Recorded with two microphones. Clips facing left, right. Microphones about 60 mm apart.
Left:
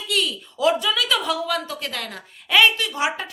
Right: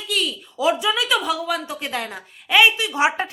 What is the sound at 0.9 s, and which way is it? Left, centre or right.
Speech, centre.